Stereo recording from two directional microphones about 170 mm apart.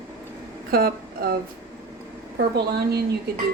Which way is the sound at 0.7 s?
60° right (ahead or behind).